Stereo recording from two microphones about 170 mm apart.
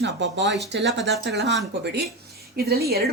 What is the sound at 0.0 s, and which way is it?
Speech, 90° right.